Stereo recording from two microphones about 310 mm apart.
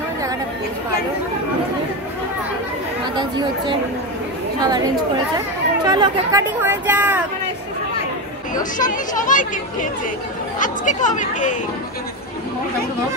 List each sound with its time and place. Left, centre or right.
4.6 s speech: centre
5.9 s speech: centre
8.7 s speech: left